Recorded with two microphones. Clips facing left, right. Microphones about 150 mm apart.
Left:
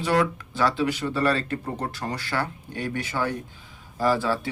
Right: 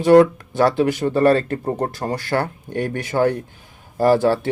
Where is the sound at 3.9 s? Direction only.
60° right (ahead or behind).